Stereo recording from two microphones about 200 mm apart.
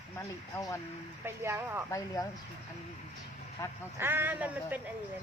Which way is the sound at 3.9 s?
10° right (ahead or behind).